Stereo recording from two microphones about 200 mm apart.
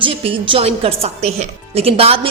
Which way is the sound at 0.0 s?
25° right (ahead or behind).